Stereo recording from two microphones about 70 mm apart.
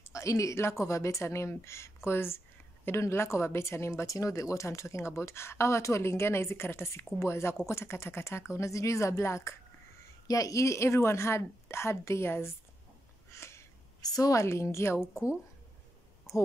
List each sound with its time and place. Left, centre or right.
0.1 s a woman's voice: left
10.2 s a woman's voice: left
13.3 s a sound: left
14.0 s a woman's voice: left
14.4 s a woman's voice: left